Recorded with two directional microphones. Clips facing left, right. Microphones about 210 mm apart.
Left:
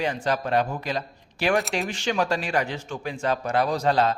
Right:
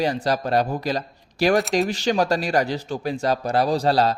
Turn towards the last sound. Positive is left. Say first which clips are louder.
# right 3 dB
turn(degrees=-35)  # may be behind; listen again after turning